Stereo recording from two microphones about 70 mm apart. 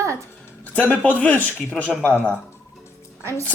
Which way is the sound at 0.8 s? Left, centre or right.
Left.